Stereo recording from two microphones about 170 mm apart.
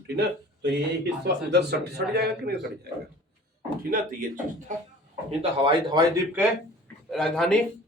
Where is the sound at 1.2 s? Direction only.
80° right.